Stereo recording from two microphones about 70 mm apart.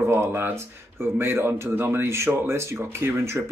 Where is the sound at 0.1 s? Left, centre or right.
Right.